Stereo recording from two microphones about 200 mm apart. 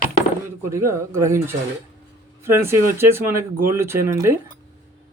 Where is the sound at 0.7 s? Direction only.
15° right (ahead or behind).